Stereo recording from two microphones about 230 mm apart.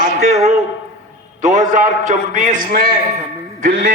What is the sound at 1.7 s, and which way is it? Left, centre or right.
Music, right.